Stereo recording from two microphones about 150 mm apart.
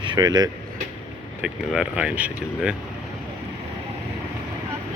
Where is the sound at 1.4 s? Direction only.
5° right (ahead or behind).